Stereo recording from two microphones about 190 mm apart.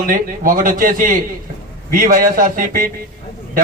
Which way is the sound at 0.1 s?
50° right (ahead or behind).